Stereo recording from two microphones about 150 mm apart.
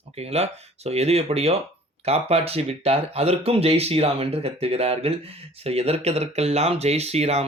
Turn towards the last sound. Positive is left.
turn(degrees=-45)  # may be behind; listen again after turning